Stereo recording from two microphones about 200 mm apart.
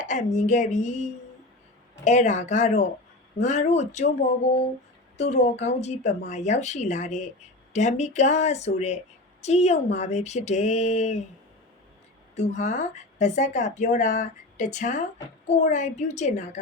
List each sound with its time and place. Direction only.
0.0 s speech: 35° left (ahead or behind)
5.3 s speech: 35° left (ahead or behind)
12.4 s speech: 35° left (ahead or behind)